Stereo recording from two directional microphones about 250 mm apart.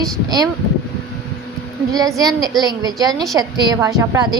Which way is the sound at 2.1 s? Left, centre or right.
Centre.